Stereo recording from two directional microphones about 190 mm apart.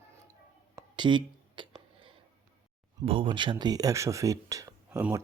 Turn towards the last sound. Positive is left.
turn(degrees=-10)  # may be behind; listen again after turning